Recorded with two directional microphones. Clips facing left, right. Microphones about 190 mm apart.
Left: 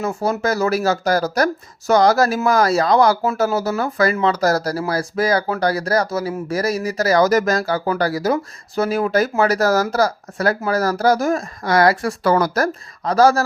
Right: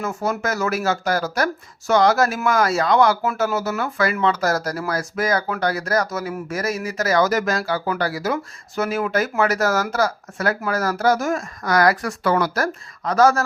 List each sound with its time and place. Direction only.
0.0 s speech: 30° left (ahead or behind)